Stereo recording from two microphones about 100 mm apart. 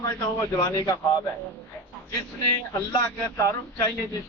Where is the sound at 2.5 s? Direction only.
35° left (ahead or behind).